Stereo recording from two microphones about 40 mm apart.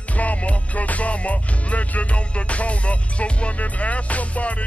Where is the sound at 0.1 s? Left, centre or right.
Left.